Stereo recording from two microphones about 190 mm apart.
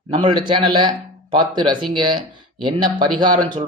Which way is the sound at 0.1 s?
25° right (ahead or behind).